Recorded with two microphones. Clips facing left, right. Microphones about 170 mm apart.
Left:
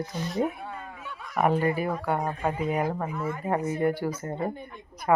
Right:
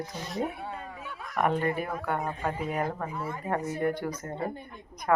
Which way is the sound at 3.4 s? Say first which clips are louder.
Left 3 dB; 15° left (ahead or behind).